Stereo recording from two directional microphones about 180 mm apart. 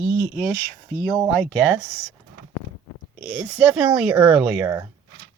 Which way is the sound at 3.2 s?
Centre (ahead or behind).